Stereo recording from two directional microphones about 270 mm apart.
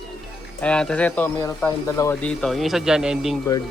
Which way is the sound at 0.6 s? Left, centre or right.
Centre.